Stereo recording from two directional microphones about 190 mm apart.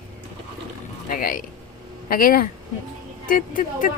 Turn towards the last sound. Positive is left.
turn(degrees=45)  # may be behind; listen again after turning